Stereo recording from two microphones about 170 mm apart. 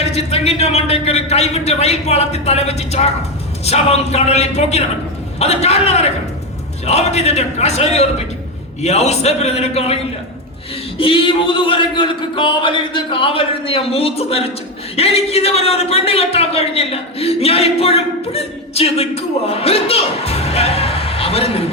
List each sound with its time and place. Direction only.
0.0 s a man's voice: 40° left (ahead or behind)